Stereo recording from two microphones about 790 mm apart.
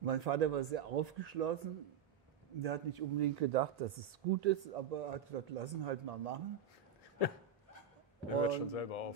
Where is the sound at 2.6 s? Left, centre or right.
Right.